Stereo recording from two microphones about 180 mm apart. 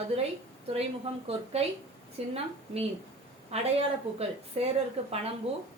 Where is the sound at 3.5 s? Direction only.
35° right (ahead or behind).